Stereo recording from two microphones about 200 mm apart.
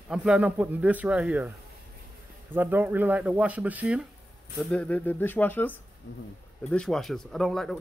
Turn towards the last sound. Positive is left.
turn(degrees=0)  # may be behind; listen again after turning